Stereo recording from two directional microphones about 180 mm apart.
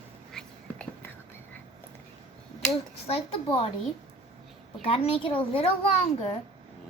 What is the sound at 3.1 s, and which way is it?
Speech, 35° left (ahead or behind).